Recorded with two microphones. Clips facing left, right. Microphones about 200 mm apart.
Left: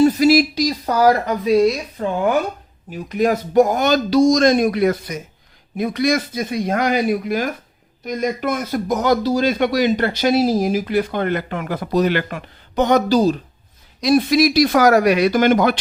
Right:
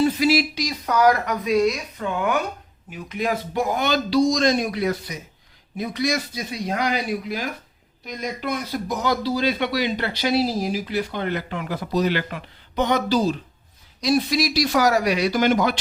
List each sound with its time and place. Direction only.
0.0 s a woman's voice: 40° left (ahead or behind)
14.0 s a man's voice: 55° left (ahead or behind)